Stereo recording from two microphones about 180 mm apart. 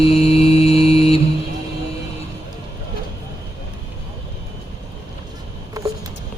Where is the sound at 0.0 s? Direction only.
35° left (ahead or behind).